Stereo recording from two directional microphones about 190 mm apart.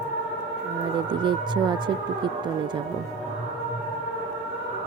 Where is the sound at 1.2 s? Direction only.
25° right (ahead or behind).